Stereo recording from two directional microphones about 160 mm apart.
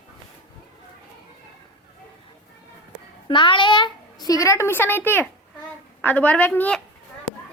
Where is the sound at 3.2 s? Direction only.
30° left (ahead or behind); by 6.8 s 10° left (ahead or behind).